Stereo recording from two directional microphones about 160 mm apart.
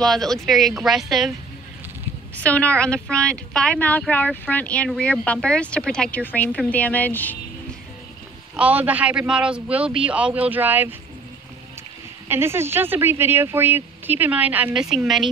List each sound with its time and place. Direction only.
0.0 s speech: centre (ahead or behind)
2.3 s a woman's voice: 10° left (ahead or behind)
8.5 s speech: 10° right (ahead or behind)
12.3 s speech: 15° right (ahead or behind)